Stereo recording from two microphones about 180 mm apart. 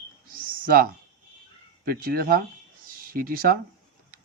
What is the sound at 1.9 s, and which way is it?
Speech, 55° right (ahead or behind).